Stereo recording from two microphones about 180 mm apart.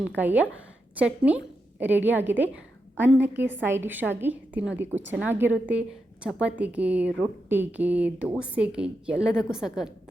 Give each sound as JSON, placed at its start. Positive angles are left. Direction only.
{"t": 0.2, "sound": "a woman's voice", "side_deg": -10}